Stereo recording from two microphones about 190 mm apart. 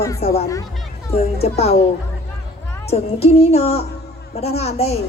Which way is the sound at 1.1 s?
35° left (ahead or behind).